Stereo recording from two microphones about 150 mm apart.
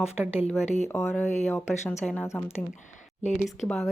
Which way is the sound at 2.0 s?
5° left (ahead or behind).